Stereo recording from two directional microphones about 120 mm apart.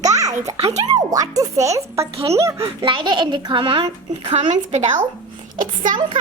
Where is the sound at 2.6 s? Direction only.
45° right (ahead or behind).